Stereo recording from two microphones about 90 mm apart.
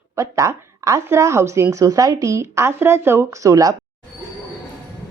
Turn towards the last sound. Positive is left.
turn(degrees=-40)  # may be behind; listen again after turning